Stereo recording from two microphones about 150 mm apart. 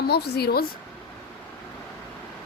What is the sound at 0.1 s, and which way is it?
Speech, 90° left.